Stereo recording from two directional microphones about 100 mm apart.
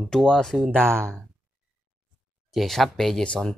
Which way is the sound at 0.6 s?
20° right (ahead or behind).